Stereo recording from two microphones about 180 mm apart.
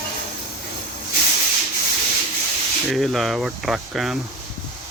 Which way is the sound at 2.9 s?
Centre (ahead or behind).